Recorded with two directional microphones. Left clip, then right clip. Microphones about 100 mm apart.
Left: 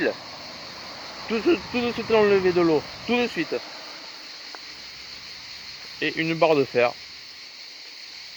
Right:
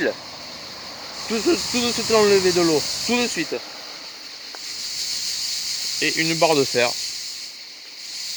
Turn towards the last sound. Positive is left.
turn(degrees=-5)  # may be behind; listen again after turning